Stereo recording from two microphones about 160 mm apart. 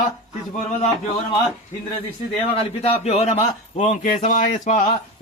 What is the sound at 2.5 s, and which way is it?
A man's voice, 40° left (ahead or behind).